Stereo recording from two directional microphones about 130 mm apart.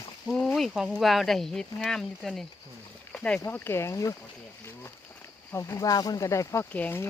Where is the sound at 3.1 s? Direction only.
10° left (ahead or behind).